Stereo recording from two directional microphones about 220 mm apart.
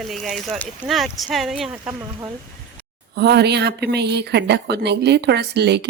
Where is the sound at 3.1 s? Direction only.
50° right (ahead or behind).